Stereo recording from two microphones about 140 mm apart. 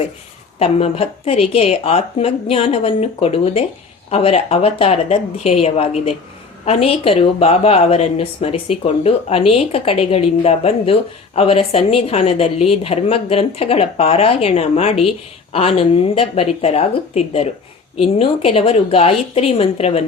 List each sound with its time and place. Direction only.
0.6 s speech: 45° left (ahead or behind)